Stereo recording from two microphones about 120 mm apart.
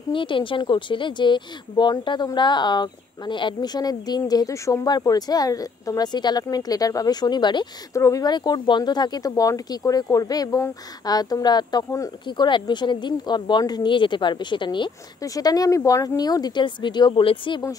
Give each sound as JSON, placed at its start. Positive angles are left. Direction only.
{"t": 0.1, "sound": "speech", "side_deg": 45}
{"t": 7.9, "sound": "speech", "side_deg": 25}
{"t": 15.2, "sound": "speech", "side_deg": 30}